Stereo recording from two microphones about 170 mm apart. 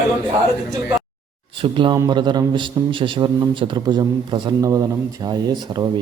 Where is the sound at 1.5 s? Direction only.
30° right (ahead or behind).